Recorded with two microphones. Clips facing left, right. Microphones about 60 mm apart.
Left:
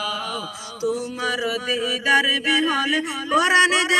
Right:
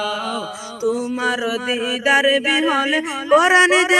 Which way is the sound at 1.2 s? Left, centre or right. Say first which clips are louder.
Right 4 dB; centre.